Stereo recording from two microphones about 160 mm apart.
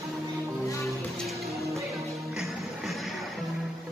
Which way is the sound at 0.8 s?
Centre (ahead or behind).